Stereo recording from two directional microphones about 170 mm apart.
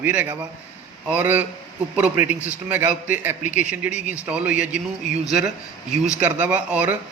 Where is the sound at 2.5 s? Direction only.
10° right (ahead or behind).